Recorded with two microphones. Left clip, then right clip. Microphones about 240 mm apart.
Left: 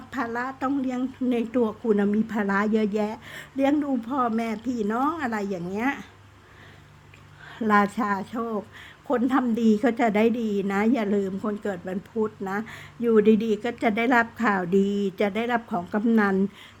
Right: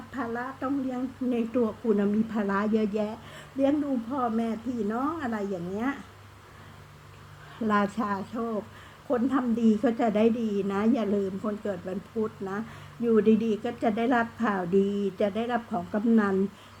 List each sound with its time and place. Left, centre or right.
0.1 s a woman's voice: left
7.6 s a woman's voice: left